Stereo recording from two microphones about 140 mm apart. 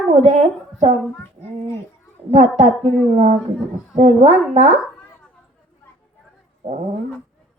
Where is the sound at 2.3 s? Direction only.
55° right (ahead or behind).